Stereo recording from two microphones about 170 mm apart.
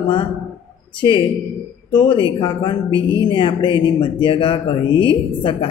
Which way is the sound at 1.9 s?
25° left (ahead or behind).